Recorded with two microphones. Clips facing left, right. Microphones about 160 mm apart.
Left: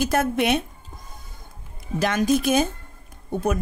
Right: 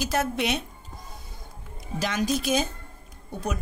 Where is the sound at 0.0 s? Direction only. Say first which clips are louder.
Left 5 dB; 50° left (ahead or behind).